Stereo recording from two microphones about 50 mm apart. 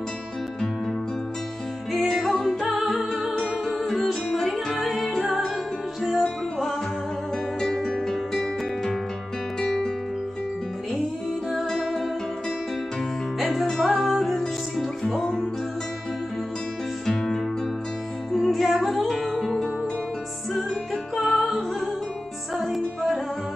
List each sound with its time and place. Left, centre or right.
1.9 s music: centre
11.5 s music: centre
13.4 s music: centre
17.0 s music: centre
22.8 s music: centre